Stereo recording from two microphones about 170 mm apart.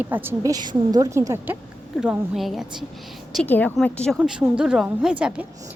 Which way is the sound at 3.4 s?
10° left (ahead or behind).